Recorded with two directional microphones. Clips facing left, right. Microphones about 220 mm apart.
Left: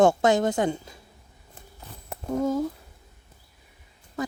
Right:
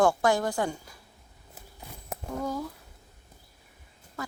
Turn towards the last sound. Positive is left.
turn(degrees=20)  # may be behind; listen again after turning